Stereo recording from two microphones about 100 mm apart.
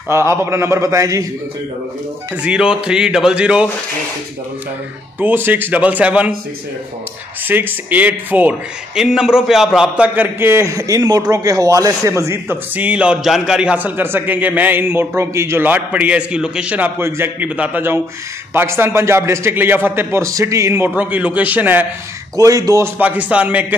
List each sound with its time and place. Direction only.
0.1 s a man's voice: 25° right (ahead or behind)
2.3 s a man's voice: 10° right (ahead or behind)
5.2 s a man's voice: 20° right (ahead or behind)
7.4 s a man's voice: 20° right (ahead or behind)
12.7 s a man's voice: 15° right (ahead or behind); by 20.9 s 30° right (ahead or behind)
20.9 s a man's voice: 15° right (ahead or behind)
22.4 s speech: 35° right (ahead or behind)
22.9 s a man's voice: 15° right (ahead or behind)